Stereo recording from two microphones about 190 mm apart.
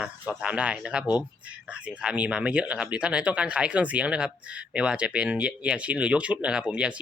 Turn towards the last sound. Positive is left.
turn(degrees=-5)  # may be behind; listen again after turning